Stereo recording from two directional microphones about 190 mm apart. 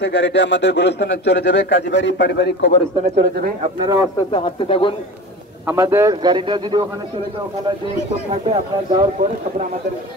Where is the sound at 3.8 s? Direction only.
20° right (ahead or behind).